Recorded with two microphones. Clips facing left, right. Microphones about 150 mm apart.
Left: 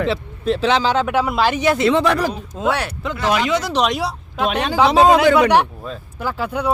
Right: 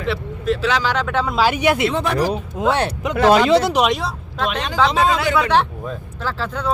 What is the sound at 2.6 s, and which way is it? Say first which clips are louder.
Speech: right 1 dB; 20° right (ahead or behind).